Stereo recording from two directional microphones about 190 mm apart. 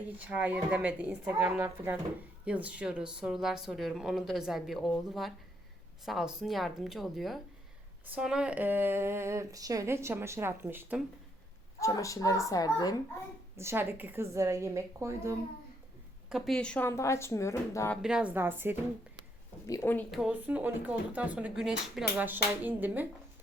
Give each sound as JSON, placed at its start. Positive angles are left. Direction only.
{"t": 0.2, "sound": "a woman's voice", "side_deg": -5}
{"t": 11.8, "sound": "speech", "side_deg": 15}
{"t": 13.6, "sound": "speech", "side_deg": -10}
{"t": 16.3, "sound": "speech", "side_deg": 5}
{"t": 17.9, "sound": "speech", "side_deg": -5}
{"t": 19.6, "sound": "speech", "side_deg": 15}
{"t": 20.1, "sound": "speech", "side_deg": -5}